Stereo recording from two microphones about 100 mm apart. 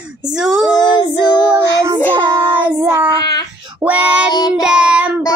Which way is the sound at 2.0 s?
15° left (ahead or behind).